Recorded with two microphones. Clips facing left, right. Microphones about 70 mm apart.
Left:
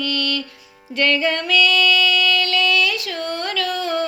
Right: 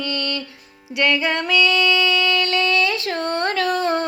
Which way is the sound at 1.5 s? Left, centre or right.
Right.